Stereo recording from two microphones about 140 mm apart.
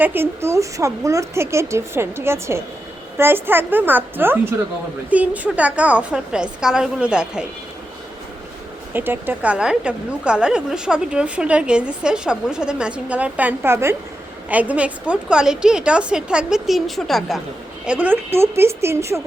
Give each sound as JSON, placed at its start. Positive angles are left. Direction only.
{"t": 0.0, "sound": "a woman's voice", "side_deg": -15}
{"t": 8.9, "sound": "a woman's voice", "side_deg": -15}
{"t": 17.8, "sound": "a woman's voice", "side_deg": -10}